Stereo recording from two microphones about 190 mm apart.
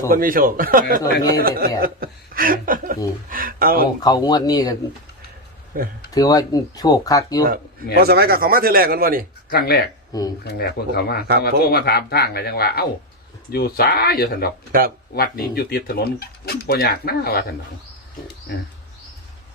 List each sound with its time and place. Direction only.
0.1 s speech: 50° right (ahead or behind)
4.0 s speech: 20° left (ahead or behind)
5.7 s speech: 50° right (ahead or behind)
6.1 s speech: 20° left (ahead or behind)
7.9 s speech: 55° right (ahead or behind)
9.5 s speech: 50° left (ahead or behind)
10.1 s speech: 20° left (ahead or behind)
10.4 s speech: 55° left (ahead or behind)
14.7 s speech: 50° right (ahead or behind)
15.1 s speech: 50° left (ahead or behind)